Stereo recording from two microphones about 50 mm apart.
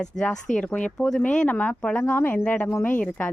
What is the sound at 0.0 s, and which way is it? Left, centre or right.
Speech, centre.